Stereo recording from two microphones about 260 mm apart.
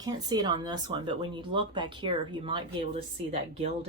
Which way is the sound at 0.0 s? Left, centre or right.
Centre.